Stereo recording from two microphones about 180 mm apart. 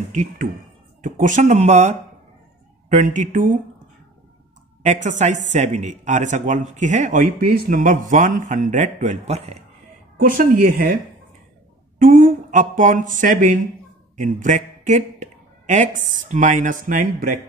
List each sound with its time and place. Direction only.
0.1 s speech: 45° right (ahead or behind)
4.8 s speech: 40° right (ahead or behind)
10.1 s speech: 50° right (ahead or behind)
12.0 s speech: 45° right (ahead or behind)